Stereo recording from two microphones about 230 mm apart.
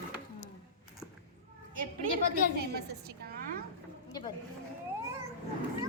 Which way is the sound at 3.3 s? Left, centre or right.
Right.